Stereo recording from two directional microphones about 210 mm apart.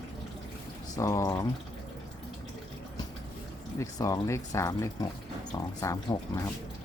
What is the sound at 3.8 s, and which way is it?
Speech, 15° left (ahead or behind).